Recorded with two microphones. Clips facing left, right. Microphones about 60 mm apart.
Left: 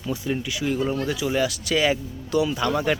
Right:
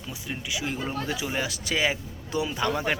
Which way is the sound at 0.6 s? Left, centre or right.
Right.